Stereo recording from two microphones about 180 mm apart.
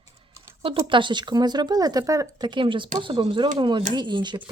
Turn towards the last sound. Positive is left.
turn(degrees=-25)  # may be behind; listen again after turning